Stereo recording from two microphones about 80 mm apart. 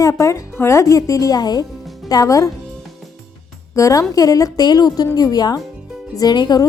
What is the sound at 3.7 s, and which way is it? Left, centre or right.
A woman's voice, left.